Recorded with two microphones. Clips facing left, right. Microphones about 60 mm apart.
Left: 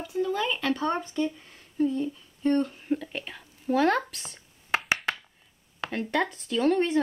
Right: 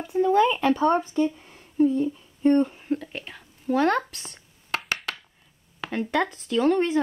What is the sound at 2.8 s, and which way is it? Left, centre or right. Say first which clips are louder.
Speech: right 1 dB; centre.